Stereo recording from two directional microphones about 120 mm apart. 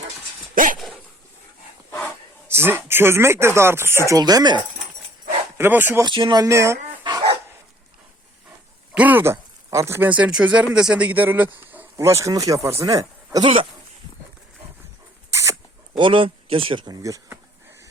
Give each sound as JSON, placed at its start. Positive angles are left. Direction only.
{"t": 1.9, "sound": "a sound", "side_deg": 15}
{"t": 2.5, "sound": "speech", "side_deg": -20}
{"t": 5.5, "sound": "speech", "side_deg": -15}
{"t": 6.0, "sound": "speech", "side_deg": -40}
{"t": 6.4, "sound": "speech", "side_deg": -25}
{"t": 7.0, "sound": "dog", "side_deg": -40}
{"t": 9.0, "sound": "a man's voice", "side_deg": -15}
{"t": 13.4, "sound": "speech", "side_deg": -50}
{"t": 15.3, "sound": "rodents", "side_deg": -25}
{"t": 16.0, "sound": "speech", "side_deg": -45}